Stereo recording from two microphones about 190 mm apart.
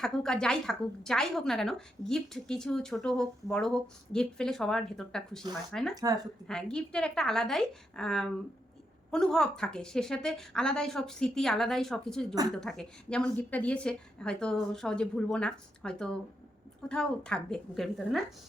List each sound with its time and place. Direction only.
0.0 s a woman's voice: 5° left (ahead or behind)
5.9 s speech: 20° right (ahead or behind)
6.5 s a woman's voice: 5° left (ahead or behind)